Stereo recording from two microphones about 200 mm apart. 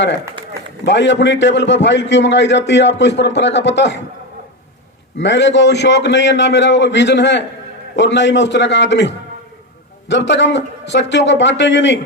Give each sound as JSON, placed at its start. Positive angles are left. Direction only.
{"t": 0.9, "sound": "a man's voice", "side_deg": 60}
{"t": 5.1, "sound": "a man's voice", "side_deg": 60}